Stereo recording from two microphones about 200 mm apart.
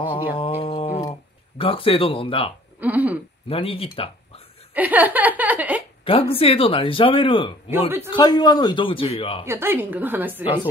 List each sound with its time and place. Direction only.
0.4 s speech: 25° left (ahead or behind)
2.8 s a woman's voice: 10° right (ahead or behind)
3.4 s speech: 30° left (ahead or behind)
4.7 s speech: 10° right (ahead or behind)
6.0 s speech: 30° left (ahead or behind)
9.5 s a woman's voice: 10° right (ahead or behind)
10.4 s speech: 25° left (ahead or behind)